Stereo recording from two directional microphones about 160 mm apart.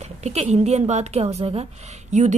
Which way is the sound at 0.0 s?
45° right (ahead or behind).